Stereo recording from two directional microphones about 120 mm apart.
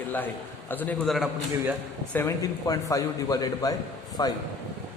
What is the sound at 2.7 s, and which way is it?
A man's voice, 30° left (ahead or behind).